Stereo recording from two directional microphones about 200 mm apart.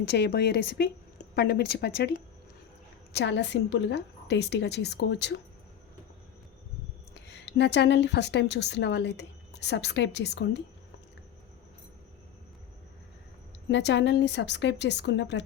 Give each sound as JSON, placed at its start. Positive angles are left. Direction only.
{"t": 0.0, "sound": "a woman's voice", "side_deg": 60}
{"t": 3.2, "sound": "a woman's voice", "side_deg": 60}
{"t": 7.1, "sound": "speech", "side_deg": 60}
{"t": 13.7, "sound": "a woman's voice", "side_deg": 60}